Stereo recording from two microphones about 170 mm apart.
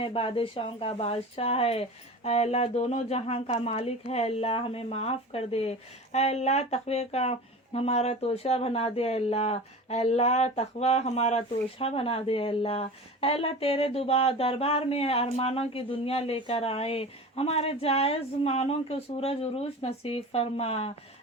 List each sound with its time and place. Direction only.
0.0 s speech: 30° left (ahead or behind)